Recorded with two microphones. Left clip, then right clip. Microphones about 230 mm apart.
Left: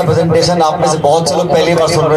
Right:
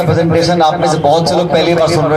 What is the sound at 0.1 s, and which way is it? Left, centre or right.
A man's voice, left.